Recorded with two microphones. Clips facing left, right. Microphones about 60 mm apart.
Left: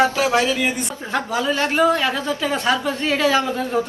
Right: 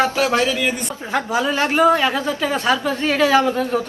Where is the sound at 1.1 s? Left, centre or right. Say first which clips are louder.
Right 2 dB; centre.